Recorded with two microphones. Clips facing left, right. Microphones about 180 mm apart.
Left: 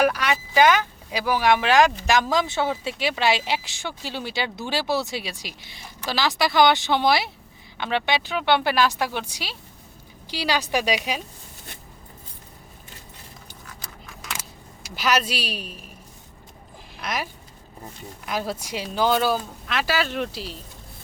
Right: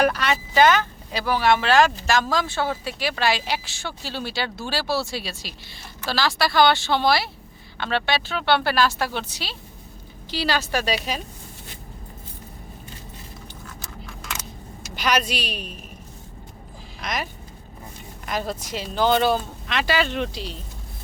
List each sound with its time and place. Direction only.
0.0 s speech: 10° left (ahead or behind)
14.9 s speech: 5° left (ahead or behind)
17.0 s speech: 10° left (ahead or behind)
18.3 s speech: 10° left (ahead or behind)